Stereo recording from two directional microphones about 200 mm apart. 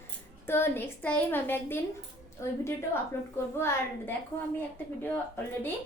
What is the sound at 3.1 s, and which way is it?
A woman's voice, 10° left (ahead or behind).